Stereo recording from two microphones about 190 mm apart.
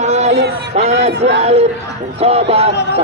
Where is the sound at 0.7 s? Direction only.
35° right (ahead or behind).